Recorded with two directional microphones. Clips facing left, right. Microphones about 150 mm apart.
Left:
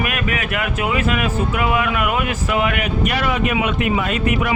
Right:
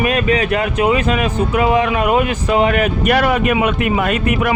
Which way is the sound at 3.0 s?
55° right (ahead or behind).